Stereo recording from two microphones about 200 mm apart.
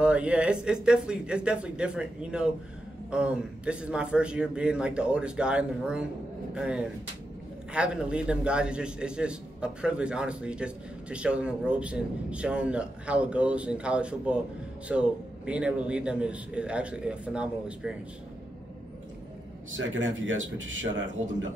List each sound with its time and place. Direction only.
0.0 s a man's voice: 5° right (ahead or behind)
19.7 s a man's voice: 75° right (ahead or behind)